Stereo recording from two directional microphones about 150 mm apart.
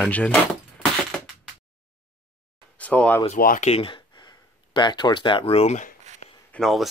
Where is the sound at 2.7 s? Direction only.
10° left (ahead or behind).